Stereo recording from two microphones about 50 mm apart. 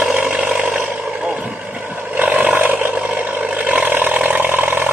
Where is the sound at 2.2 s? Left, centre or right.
Right.